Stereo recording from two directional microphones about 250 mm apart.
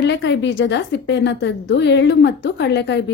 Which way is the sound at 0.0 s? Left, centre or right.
Left.